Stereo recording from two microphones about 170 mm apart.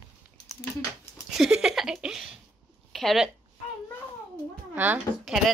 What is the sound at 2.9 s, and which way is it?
Speech, centre (ahead or behind).